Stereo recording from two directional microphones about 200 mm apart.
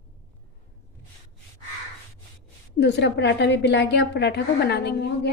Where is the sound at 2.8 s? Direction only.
60° left (ahead or behind).